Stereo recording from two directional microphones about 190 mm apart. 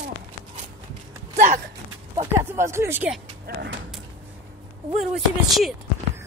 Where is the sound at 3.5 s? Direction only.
55° right (ahead or behind).